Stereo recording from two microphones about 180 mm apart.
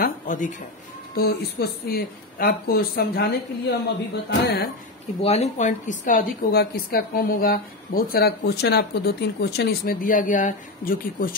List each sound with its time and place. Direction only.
0.0 s a sound: 45° left (ahead or behind)
1.1 s speech: 60° left (ahead or behind)
5.2 s a woman's voice: 35° left (ahead or behind); by 11.3 s 55° left (ahead or behind)